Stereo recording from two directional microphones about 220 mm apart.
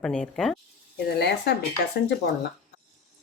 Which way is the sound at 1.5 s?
50° left (ahead or behind).